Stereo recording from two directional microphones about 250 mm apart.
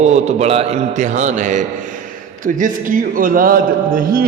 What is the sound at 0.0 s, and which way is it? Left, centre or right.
A man's voice, right.